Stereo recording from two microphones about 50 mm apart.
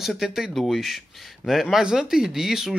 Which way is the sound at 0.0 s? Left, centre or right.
Centre.